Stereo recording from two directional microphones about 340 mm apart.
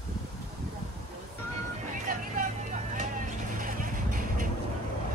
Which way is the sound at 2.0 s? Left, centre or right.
Right.